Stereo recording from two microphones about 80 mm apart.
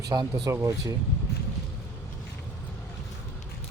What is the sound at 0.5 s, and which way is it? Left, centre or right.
Speech, right.